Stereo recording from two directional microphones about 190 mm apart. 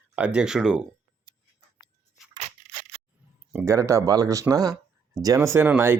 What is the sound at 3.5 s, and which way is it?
Speech, 10° right (ahead or behind).